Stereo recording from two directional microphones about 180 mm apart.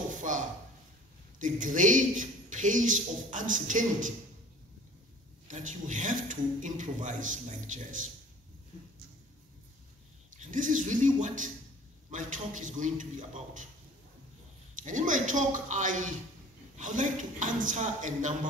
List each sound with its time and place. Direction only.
0.2 s a sound: 45° right (ahead or behind)
1.4 s a man's voice: 45° right (ahead or behind)
5.5 s a man's voice: 45° right (ahead or behind)
10.4 s a man's voice: 45° right (ahead or behind)
14.8 s a man's voice: 45° right (ahead or behind)